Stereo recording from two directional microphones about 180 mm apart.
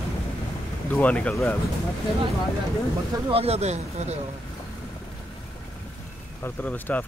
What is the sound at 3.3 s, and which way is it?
Speech, 35° right (ahead or behind).